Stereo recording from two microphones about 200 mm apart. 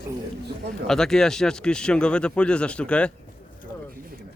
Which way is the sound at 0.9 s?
5° left (ahead or behind).